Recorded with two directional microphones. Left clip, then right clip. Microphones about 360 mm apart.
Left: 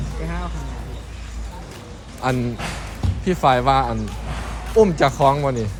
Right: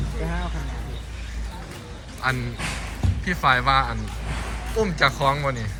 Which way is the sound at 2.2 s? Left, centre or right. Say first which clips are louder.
Left 3 dB; centre.